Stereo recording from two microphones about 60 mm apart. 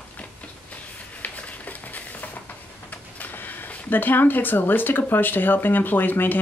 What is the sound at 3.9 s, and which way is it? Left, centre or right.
Speech, left.